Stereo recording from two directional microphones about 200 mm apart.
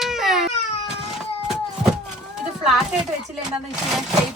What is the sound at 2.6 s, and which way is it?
Speech, 5° right (ahead or behind).